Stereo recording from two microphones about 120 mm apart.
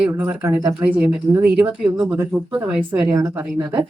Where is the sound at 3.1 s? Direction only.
25° right (ahead or behind).